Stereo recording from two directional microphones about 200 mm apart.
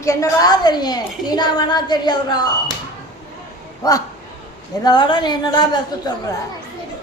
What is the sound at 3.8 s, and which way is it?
A woman's voice, 15° left (ahead or behind).